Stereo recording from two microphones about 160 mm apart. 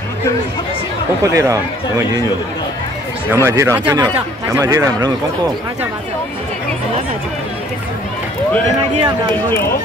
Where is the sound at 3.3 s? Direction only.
15° right (ahead or behind).